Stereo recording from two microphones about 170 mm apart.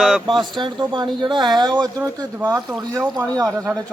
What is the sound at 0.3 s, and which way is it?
Speech, 25° right (ahead or behind).